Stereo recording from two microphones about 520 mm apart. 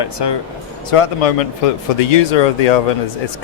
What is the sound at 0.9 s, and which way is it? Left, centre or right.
Speech, left.